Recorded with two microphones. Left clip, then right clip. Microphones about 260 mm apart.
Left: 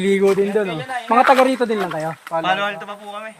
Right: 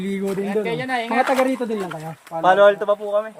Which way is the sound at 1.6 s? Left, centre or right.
Left.